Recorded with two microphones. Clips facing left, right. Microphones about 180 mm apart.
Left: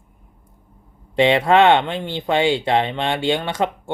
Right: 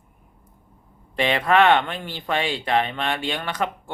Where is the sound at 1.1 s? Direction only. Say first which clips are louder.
Left 5 dB; 25° left (ahead or behind).